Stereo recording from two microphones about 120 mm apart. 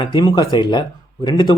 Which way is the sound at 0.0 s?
35° left (ahead or behind).